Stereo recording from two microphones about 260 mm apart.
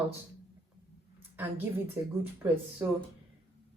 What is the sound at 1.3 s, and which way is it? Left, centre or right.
A woman's voice, centre.